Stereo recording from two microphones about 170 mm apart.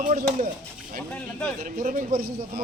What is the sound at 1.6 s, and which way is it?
Speech, 50° right (ahead or behind).